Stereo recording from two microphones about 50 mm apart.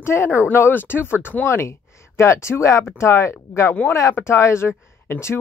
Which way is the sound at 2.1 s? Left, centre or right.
Left.